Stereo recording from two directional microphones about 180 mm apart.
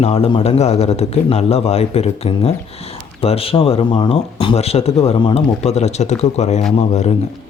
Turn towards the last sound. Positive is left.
turn(degrees=35)  # may be behind; listen again after turning